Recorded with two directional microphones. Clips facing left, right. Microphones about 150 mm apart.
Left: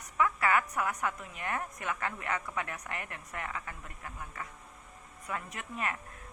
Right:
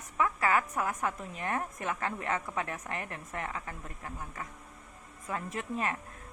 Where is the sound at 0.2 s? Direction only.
35° right (ahead or behind).